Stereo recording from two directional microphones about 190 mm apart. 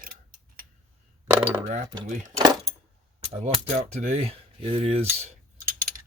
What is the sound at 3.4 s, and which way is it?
Speech, 35° right (ahead or behind).